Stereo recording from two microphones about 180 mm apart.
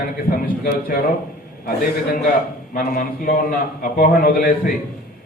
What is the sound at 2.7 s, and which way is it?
Speech, 50° left (ahead or behind).